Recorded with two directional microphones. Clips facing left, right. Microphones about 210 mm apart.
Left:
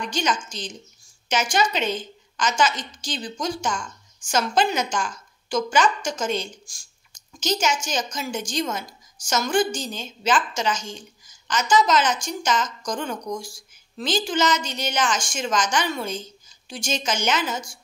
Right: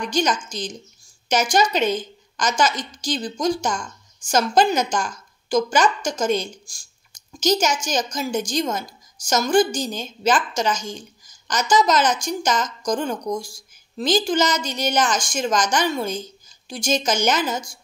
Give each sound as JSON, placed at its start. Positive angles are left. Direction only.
{"t": 0.1, "sound": "a woman's voice", "side_deg": -40}